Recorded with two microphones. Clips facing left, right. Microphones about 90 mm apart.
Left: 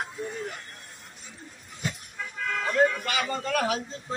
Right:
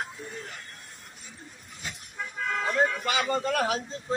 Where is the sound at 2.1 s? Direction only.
15° right (ahead or behind).